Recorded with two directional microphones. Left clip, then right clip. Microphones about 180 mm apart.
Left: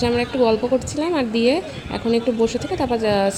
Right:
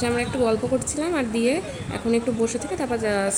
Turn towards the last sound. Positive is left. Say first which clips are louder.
# left 5 dB
turn(degrees=10)  # may be behind; listen again after turning